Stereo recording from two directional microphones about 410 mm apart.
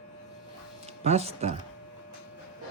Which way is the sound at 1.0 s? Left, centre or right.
Centre.